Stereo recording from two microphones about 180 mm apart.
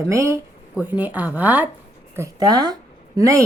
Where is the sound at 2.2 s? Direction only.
20° right (ahead or behind).